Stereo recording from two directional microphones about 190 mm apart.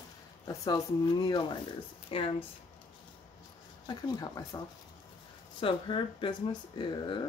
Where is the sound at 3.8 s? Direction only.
20° left (ahead or behind).